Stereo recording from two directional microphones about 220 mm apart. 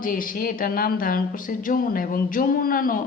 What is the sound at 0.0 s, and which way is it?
A woman's voice, 40° left (ahead or behind).